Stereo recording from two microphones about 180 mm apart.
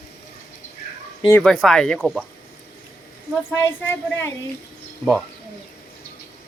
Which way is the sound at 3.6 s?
15° left (ahead or behind).